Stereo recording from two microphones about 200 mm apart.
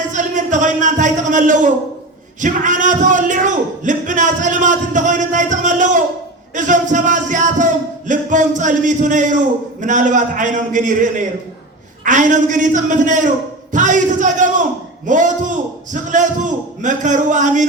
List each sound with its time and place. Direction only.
0.1 s speech: 40° right (ahead or behind)